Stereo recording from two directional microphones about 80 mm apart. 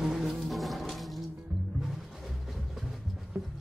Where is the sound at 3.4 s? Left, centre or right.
Right.